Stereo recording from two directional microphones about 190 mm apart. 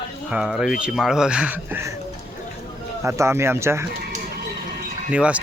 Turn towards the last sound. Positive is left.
turn(degrees=-5)  # may be behind; listen again after turning